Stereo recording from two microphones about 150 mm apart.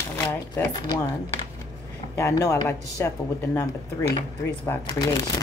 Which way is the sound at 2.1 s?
20° left (ahead or behind).